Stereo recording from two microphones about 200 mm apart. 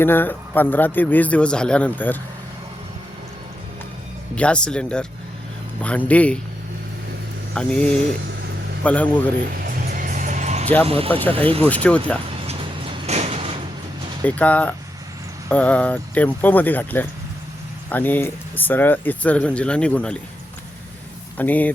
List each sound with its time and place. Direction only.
0.0 s speech: 10° left (ahead or behind)
4.4 s speech: 5° left (ahead or behind)
7.5 s speech: 5° left (ahead or behind)
9.6 s music: 45° right (ahead or behind)
10.8 s speech: 30° right (ahead or behind)
11.1 s speech: 10° left (ahead or behind)
11.3 s speech: 30° right (ahead or behind)
11.6 s speech: 5° left (ahead or behind)
13.1 s sliding door: 30° right (ahead or behind)
14.3 s speech: 5° left (ahead or behind)
21.3 s speech: 10° left (ahead or behind)